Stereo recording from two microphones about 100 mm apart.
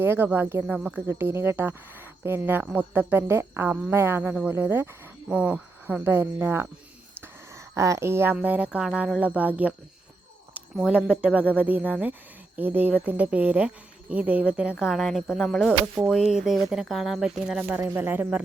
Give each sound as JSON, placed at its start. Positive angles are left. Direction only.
{"t": 0.0, "sound": "speech", "side_deg": -20}
{"t": 0.8, "sound": "speech", "side_deg": -10}
{"t": 1.0, "sound": "speech", "side_deg": -25}
{"t": 7.2, "sound": "a sound", "side_deg": -30}
{"t": 8.4, "sound": "speech", "side_deg": -15}
{"t": 10.8, "sound": "speech", "side_deg": -10}
{"t": 17.6, "sound": "speech", "side_deg": -20}